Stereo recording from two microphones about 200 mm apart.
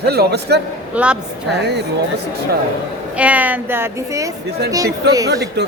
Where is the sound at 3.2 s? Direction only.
5° right (ahead or behind).